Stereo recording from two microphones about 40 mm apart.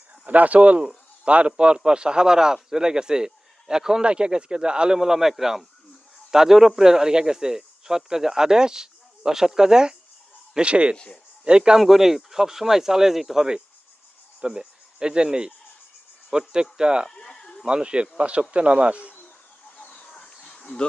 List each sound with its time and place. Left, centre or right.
0.3 s speech: right
4.9 s speech: centre
11.8 s speech: centre
14.4 s cricket: centre
16.3 s speech: centre
17.1 s bleat: centre
17.7 s speech: right
19.7 s chicken: left
20.4 s a sound: left